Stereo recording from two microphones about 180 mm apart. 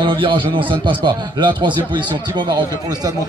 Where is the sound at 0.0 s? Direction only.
25° right (ahead or behind).